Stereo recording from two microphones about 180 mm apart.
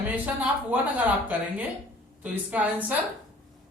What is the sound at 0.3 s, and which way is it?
A woman's voice, 10° right (ahead or behind).